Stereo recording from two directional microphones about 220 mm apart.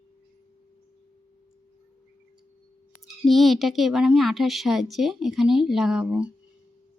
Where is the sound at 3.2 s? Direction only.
Centre (ahead or behind).